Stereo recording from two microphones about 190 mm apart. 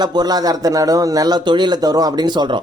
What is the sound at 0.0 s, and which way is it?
A man's voice, 20° right (ahead or behind).